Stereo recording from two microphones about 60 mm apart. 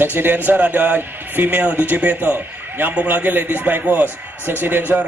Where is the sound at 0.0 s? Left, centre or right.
Right.